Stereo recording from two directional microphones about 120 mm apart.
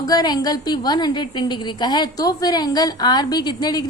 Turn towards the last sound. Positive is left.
turn(degrees=35)  # may be behind; listen again after turning